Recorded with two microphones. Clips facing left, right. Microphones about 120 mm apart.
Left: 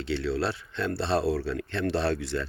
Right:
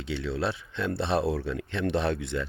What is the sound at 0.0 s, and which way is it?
Speech, 15° right (ahead or behind).